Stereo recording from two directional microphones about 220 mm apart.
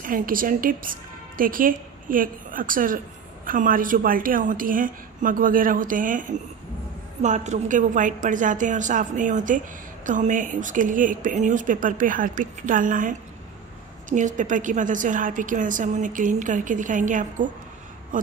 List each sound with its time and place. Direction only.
0.0 s a woman's voice: 40° right (ahead or behind)